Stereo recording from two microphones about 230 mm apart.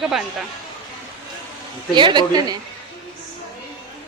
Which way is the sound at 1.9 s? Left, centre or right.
Centre.